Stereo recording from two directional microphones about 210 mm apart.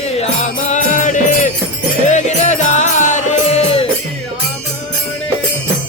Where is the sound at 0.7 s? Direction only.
35° left (ahead or behind).